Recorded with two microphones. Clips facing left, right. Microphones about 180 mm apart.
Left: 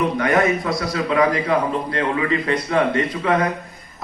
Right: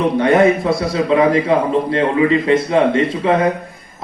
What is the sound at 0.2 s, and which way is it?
A man's voice, 30° right (ahead or behind).